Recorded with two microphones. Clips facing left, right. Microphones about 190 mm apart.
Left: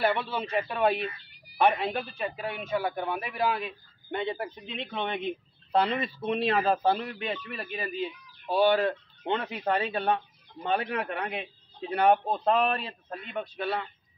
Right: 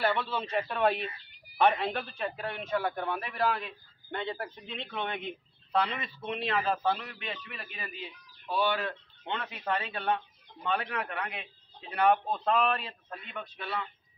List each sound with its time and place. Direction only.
0.0 s a man's voice: 15° left (ahead or behind); by 13.8 s 35° left (ahead or behind)